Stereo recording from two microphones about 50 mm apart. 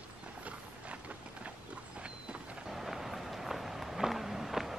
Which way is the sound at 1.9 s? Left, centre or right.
Right.